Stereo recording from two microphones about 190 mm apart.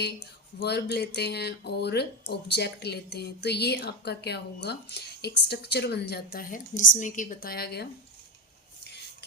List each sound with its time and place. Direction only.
0.6 s speech: 60° left (ahead or behind)